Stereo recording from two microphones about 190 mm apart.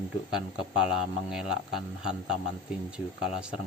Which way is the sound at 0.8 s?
5° right (ahead or behind).